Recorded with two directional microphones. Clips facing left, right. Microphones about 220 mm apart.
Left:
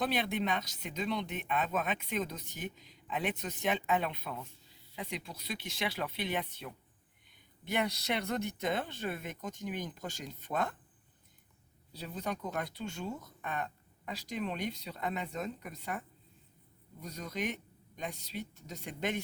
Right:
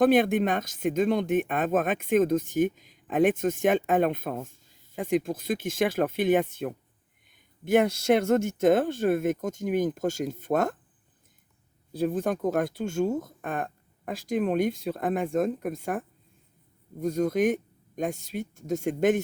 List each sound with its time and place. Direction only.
0.0 s speech: 50° right (ahead or behind)
11.9 s speech: 50° right (ahead or behind)